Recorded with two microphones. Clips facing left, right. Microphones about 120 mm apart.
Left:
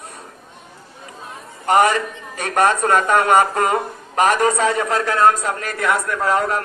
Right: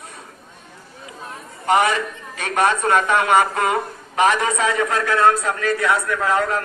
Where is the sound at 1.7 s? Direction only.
40° left (ahead or behind).